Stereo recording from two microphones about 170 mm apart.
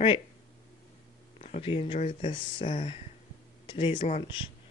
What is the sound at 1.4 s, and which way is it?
Speech, 35° left (ahead or behind).